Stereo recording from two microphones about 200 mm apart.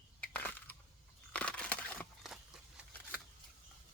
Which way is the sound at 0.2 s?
10° left (ahead or behind).